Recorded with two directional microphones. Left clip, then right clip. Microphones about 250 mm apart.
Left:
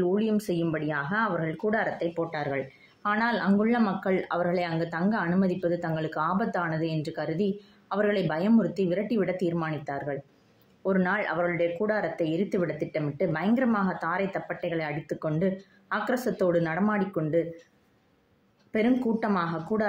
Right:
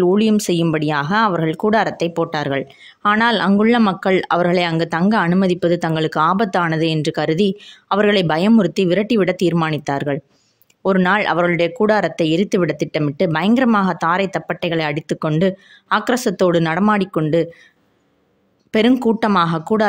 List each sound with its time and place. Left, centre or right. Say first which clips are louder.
0.0 s speech: right 11 dB; right
18.7 s speech: right 11 dB; right